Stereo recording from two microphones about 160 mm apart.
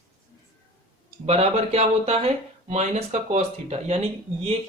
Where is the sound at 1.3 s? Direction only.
40° right (ahead or behind).